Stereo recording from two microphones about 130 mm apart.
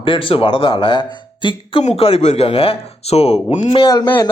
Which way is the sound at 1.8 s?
50° left (ahead or behind).